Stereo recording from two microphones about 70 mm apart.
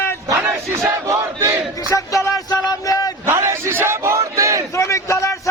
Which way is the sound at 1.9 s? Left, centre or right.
Left.